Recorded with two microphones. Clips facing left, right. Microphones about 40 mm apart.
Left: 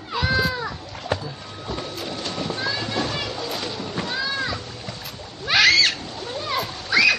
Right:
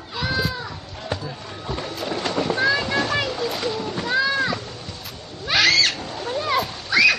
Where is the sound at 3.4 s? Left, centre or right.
Centre.